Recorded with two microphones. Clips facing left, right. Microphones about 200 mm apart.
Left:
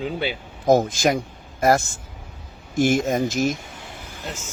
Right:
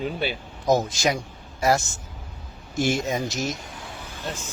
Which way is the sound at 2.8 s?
50° left (ahead or behind).